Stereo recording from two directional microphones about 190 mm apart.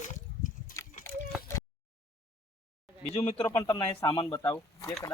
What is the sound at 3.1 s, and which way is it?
A man's voice, 30° left (ahead or behind).